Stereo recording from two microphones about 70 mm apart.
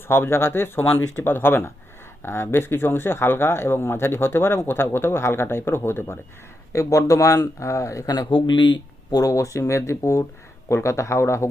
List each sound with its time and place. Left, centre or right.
0.1 s speech: left
6.7 s speech: left
9.1 s speech: left